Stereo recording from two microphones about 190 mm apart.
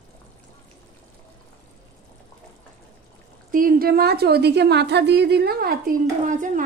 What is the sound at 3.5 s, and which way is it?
A woman's voice, 45° right (ahead or behind).